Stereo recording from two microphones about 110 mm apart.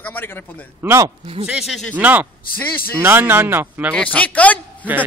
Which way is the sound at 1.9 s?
15° right (ahead or behind).